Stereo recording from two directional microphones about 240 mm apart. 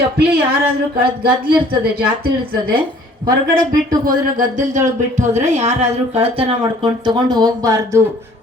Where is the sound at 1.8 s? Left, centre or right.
Right.